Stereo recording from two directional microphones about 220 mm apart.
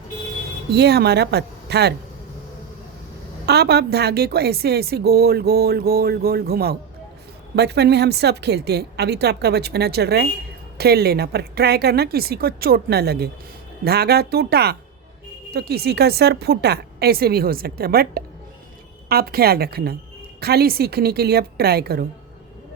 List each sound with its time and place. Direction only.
0.7 s a woman's voice: 50° right (ahead or behind)
3.4 s a woman's voice: 50° right (ahead or behind)